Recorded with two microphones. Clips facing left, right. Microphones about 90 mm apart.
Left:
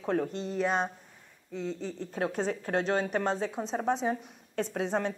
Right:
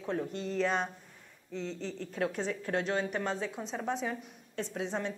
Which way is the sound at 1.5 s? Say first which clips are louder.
Left 3 dB; 10° left (ahead or behind).